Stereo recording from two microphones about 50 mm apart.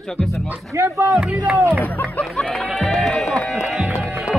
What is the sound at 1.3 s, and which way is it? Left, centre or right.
Speech, right.